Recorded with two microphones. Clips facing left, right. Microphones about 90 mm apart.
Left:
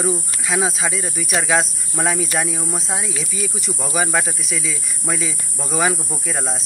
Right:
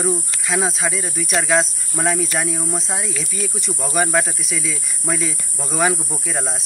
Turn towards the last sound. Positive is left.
turn(degrees=0)  # may be behind; listen again after turning